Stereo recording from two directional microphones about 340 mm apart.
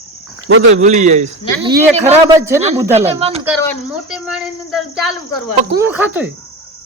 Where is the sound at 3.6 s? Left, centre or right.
Centre.